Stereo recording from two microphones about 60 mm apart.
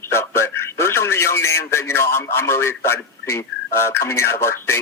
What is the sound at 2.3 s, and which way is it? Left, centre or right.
Speech, left.